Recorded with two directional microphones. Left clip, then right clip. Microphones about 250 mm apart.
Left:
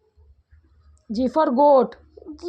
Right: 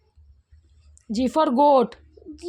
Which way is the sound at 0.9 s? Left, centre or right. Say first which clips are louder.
Left 1 dB; right.